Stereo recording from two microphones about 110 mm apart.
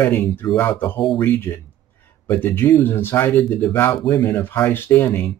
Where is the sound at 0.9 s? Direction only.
5° left (ahead or behind).